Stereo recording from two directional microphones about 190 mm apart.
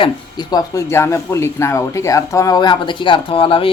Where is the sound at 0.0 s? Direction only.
20° left (ahead or behind).